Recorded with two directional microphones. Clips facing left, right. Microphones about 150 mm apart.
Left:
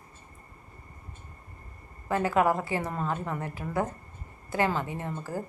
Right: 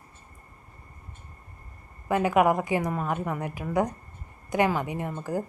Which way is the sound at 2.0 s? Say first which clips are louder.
Right 3 dB; 15° right (ahead or behind).